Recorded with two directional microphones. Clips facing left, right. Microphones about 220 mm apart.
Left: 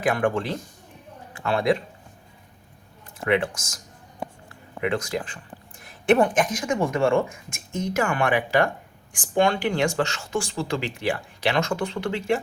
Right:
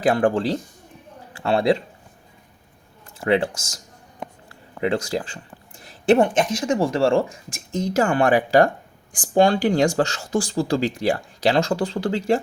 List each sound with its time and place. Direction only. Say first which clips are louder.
0.0 s speech: right 4 dB; 35° right (ahead or behind)
3.2 s speech: right 3 dB; 30° right (ahead or behind)